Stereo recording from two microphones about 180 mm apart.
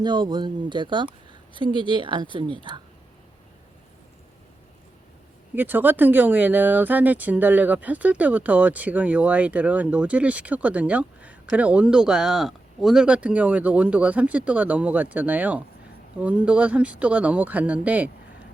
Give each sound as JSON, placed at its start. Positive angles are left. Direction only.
{"t": 0.0, "sound": "a woman's voice", "side_deg": -25}
{"t": 5.5, "sound": "speech", "side_deg": -10}